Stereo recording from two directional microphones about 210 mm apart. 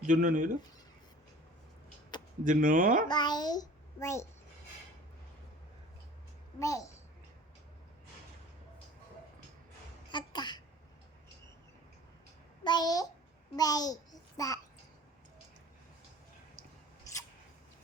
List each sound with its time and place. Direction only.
0.0 s speech: 40° right (ahead or behind)
2.4 s speech: 40° right (ahead or behind)
3.1 s a child's voice: 20° left (ahead or behind)
6.6 s a child's voice: 15° left (ahead or behind)
10.1 s a sound: 20° left (ahead or behind)
12.6 s a child's voice: 20° left (ahead or behind)
17.1 s scissors: 15° left (ahead or behind)